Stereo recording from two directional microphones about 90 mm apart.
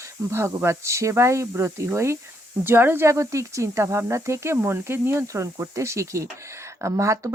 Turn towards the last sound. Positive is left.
turn(degrees=-35)  # may be behind; listen again after turning